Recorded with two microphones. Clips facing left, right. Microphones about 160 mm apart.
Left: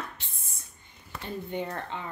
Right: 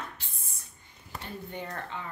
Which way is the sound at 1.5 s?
25° left (ahead or behind).